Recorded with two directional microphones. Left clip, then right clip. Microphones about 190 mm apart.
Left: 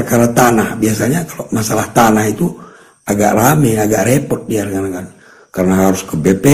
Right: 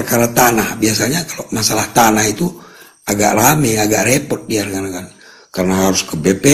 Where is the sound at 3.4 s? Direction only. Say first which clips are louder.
Left 1 dB; 35° right (ahead or behind).